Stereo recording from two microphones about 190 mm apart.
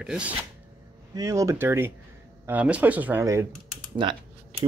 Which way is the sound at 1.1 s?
15° right (ahead or behind).